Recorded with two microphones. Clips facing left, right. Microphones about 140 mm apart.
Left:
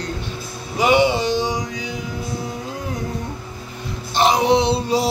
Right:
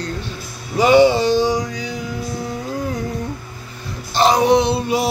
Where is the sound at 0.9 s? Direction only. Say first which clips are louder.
Right 5 dB; 20° left (ahead or behind).